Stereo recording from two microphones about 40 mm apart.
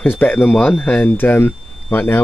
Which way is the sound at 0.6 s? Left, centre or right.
Left.